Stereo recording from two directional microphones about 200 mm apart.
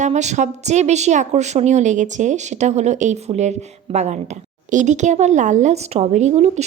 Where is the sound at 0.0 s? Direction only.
35° right (ahead or behind).